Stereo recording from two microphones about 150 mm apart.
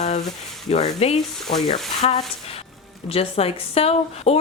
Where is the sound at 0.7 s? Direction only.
45° left (ahead or behind).